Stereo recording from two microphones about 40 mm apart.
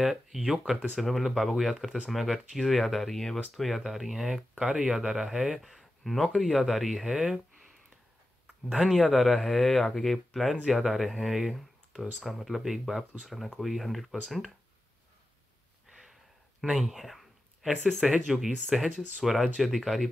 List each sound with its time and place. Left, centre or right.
0.0 s speech: centre
0.9 s speech: centre
3.6 s speech: centre
4.6 s speech: centre
5.6 s speech: centre
8.8 s speech: centre
15.9 s a sound: centre
17.8 s speech: centre